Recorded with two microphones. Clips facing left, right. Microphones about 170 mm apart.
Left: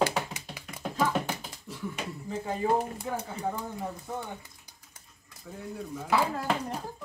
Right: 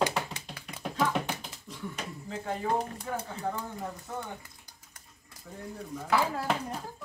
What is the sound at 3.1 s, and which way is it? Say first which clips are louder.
Speech: even; 10° left (ahead or behind).